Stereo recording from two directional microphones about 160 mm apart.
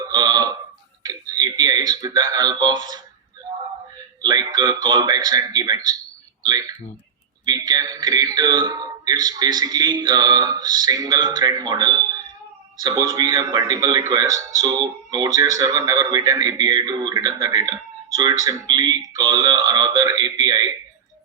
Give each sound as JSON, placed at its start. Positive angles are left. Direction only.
{"t": 0.0, "sound": "burping", "side_deg": -25}
{"t": 1.0, "sound": "speech", "side_deg": -25}
{"t": 3.5, "sound": "a sound", "side_deg": -25}
{"t": 4.2, "sound": "a man's voice", "side_deg": -25}